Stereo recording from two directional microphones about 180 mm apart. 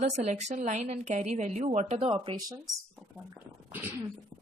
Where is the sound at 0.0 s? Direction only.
40° right (ahead or behind).